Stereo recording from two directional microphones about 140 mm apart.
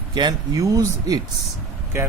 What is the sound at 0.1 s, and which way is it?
Speech, 30° right (ahead or behind).